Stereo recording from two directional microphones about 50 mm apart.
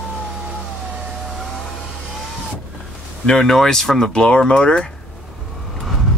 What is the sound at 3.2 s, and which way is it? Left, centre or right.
Speech, centre.